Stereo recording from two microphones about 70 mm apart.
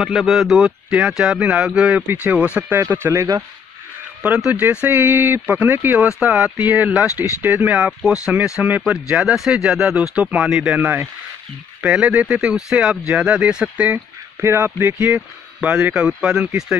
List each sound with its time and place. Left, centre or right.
0.0 s speech: centre
1.6 s speech: centre
2.7 s speech: right
4.5 s speech: right
8.1 s speech: centre
8.9 s speech: centre
10.8 s speech: right
14.4 s speech: right; by 16.7 s centre